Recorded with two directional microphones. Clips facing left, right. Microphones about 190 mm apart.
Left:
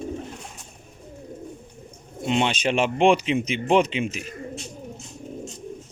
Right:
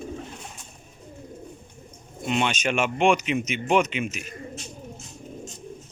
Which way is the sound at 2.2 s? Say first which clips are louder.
Left 2 dB; 25° left (ahead or behind).